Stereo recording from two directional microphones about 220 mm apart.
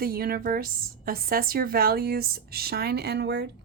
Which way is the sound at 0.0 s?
45° right (ahead or behind).